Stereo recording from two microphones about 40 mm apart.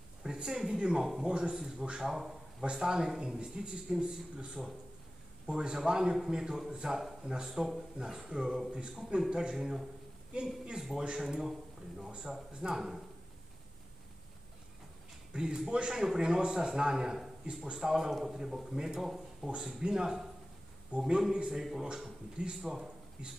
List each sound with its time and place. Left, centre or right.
0.2 s a sound: centre
0.7 s a man's voice: right
12.1 s a man's voice: right
15.3 s a man's voice: centre
20.9 s speech: right
21.5 s a man's voice: centre
22.6 s a sound: centre